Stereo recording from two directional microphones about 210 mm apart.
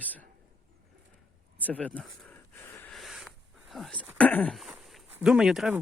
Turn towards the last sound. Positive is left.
turn(degrees=-5)  # may be behind; listen again after turning